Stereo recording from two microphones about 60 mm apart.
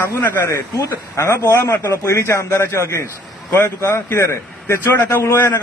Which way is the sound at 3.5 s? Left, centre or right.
Left.